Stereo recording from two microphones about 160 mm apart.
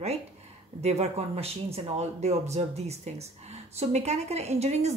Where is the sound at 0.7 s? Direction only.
40° right (ahead or behind).